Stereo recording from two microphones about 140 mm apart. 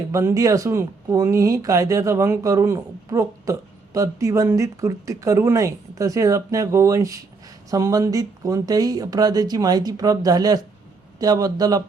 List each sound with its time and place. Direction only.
0.1 s speech: 20° right (ahead or behind)